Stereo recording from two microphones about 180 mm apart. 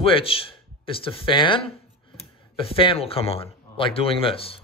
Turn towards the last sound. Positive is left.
turn(degrees=30)  # may be behind; listen again after turning